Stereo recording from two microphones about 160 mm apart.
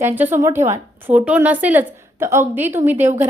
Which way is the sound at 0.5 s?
45° right (ahead or behind).